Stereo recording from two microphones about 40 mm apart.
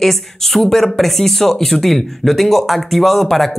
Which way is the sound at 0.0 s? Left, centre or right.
Centre.